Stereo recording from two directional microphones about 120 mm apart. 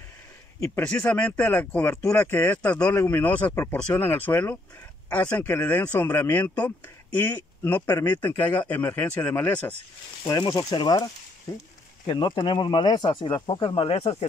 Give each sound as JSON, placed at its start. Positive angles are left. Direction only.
{"t": 1.0, "sound": "speech", "side_deg": 10}
{"t": 10.2, "sound": "speech", "side_deg": 30}
{"t": 12.1, "sound": "speech", "side_deg": 40}
{"t": 13.8, "sound": "speech", "side_deg": 55}